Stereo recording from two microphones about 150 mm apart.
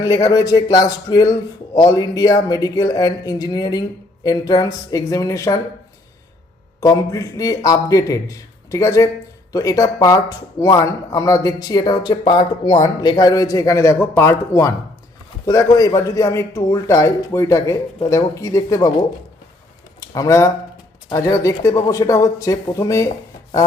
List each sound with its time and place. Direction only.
0.0 s a man's voice: 25° left (ahead or behind)
6.7 s a man's voice: 25° left (ahead or behind)
20.0 s a man's voice: 20° left (ahead or behind)